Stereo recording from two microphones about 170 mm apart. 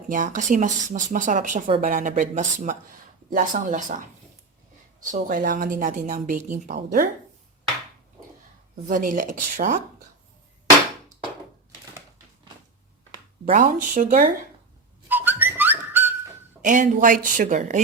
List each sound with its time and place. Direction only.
0.1 s speech: 50° right (ahead or behind)
5.1 s speech: 50° right (ahead or behind)
6.7 s speech: 60° right (ahead or behind)
8.9 s speech: 50° right (ahead or behind)
13.4 s speech: 55° right (ahead or behind)
15.1 s whistling: 10° right (ahead or behind)
16.6 s speech: 50° right (ahead or behind)